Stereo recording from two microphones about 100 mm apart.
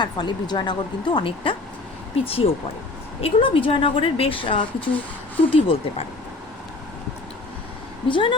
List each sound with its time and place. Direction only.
0.0 s speech: 50° left (ahead or behind)
2.2 s speech: 75° left (ahead or behind)
8.0 s speech: 55° left (ahead or behind)